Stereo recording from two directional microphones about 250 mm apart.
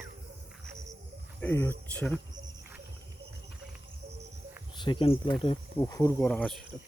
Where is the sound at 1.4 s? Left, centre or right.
Centre.